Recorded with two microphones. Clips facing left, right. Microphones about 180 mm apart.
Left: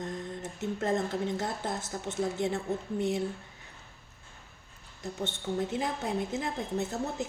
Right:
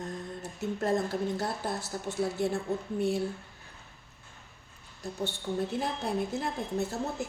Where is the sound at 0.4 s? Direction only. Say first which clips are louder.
Right 1 dB; 20° left (ahead or behind).